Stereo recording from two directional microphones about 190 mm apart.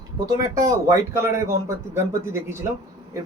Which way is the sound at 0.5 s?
20° right (ahead or behind).